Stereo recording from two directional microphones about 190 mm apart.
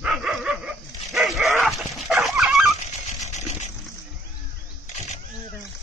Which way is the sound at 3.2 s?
35° left (ahead or behind).